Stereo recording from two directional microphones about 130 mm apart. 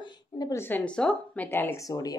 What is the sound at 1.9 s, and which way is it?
Speech, 30° left (ahead or behind).